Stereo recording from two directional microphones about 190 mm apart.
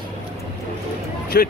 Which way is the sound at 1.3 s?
50° left (ahead or behind).